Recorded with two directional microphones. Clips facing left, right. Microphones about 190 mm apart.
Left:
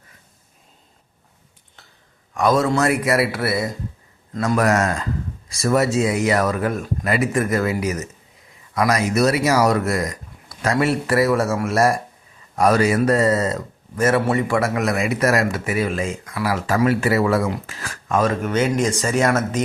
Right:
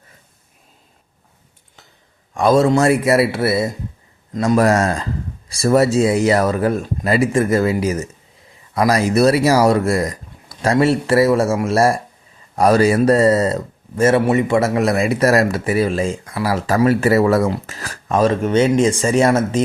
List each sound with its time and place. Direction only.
2.3 s speech: 30° right (ahead or behind)